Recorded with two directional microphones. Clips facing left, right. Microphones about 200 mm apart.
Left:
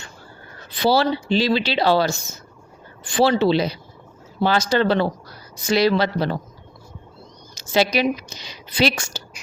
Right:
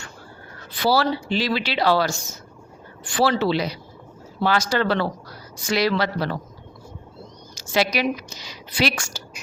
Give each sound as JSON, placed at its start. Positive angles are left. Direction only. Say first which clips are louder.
{"t": 0.8, "sound": "a woman's voice", "louder": "left 2 dB", "side_deg": 25}
{"t": 7.5, "sound": "a sound", "louder": "left 3 dB", "side_deg": 25}
{"t": 7.9, "sound": "a woman's voice", "louder": "left 3 dB", "side_deg": 25}